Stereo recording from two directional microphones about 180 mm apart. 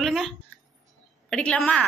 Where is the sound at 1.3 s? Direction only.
5° left (ahead or behind).